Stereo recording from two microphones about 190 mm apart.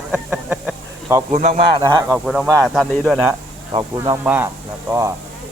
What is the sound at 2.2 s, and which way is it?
Speech, centre (ahead or behind).